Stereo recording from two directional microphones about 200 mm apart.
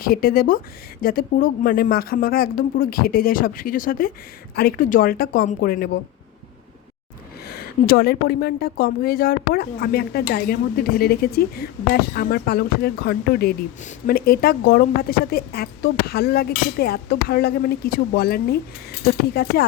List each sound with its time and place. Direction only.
0.0 s a woman's voice: 50° left (ahead or behind)
7.4 s a woman's voice: 50° left (ahead or behind)